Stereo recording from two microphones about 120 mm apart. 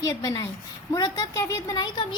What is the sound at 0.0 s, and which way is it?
A woman's voice, 30° left (ahead or behind).